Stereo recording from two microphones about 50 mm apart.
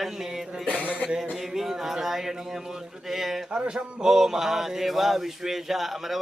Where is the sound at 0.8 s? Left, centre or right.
Right.